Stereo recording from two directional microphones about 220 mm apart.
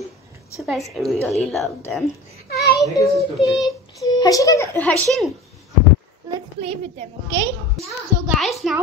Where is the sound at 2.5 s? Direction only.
45° left (ahead or behind).